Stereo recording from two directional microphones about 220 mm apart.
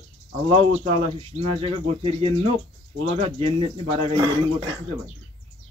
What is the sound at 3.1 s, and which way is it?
A man's voice, 25° right (ahead or behind).